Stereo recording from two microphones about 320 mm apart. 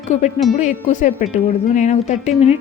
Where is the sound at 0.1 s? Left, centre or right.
Left.